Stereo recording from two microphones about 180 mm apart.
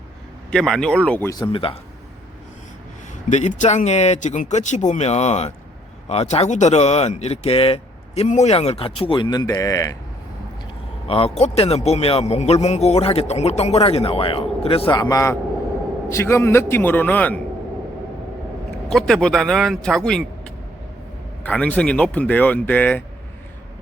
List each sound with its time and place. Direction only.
0.5 s speech: 5° left (ahead or behind)
1.3 s speech: 25° left (ahead or behind)
3.2 s speech: 40° left (ahead or behind); by 10.0 s 20° left (ahead or behind)
11.1 s speech: 35° left (ahead or behind)
15.1 s speech: 15° left (ahead or behind)
18.9 s speech: 5° left (ahead or behind)
21.4 s speech: 10° left (ahead or behind)